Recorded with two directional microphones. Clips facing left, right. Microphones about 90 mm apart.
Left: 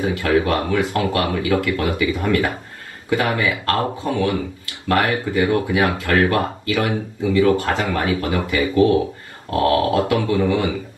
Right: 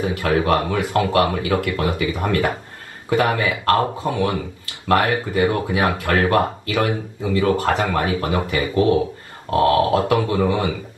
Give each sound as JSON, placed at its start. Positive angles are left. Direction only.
{"t": 0.0, "sound": "speech", "side_deg": -25}